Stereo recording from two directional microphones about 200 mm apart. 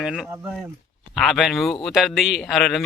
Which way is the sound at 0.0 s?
5° right (ahead or behind).